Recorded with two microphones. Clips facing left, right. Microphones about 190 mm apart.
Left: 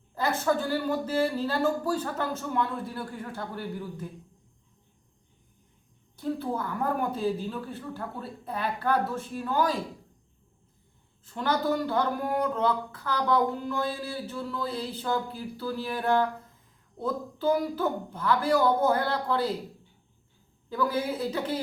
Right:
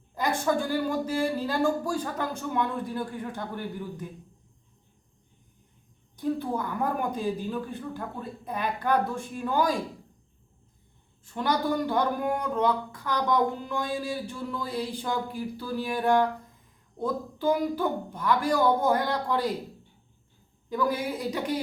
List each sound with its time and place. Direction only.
0.1 s speech: 15° right (ahead or behind)
6.1 s a sound: 15° right (ahead or behind)
7.1 s speech: 15° right (ahead or behind)
11.3 s speech: 15° right (ahead or behind)
20.7 s speech: 15° right (ahead or behind)